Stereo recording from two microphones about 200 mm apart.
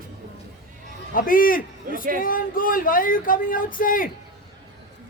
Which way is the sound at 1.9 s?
45° right (ahead or behind).